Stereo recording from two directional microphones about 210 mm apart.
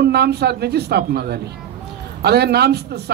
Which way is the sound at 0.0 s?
50° right (ahead or behind).